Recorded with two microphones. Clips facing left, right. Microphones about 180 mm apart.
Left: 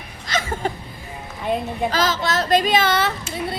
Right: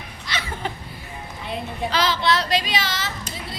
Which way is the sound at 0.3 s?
45° left (ahead or behind).